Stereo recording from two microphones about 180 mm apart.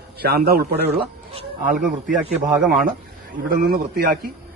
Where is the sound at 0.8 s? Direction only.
35° right (ahead or behind).